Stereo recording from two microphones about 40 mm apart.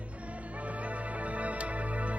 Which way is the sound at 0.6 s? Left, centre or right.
Right.